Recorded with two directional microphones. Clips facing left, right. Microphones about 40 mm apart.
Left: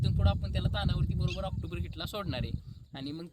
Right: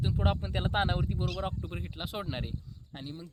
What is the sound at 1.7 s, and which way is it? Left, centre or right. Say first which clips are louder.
Speech: even; centre.